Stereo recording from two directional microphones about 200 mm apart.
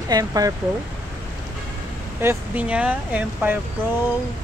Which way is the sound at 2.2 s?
10° right (ahead or behind).